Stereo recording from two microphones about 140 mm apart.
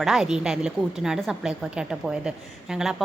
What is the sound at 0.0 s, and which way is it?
A woman's voice, 5° right (ahead or behind).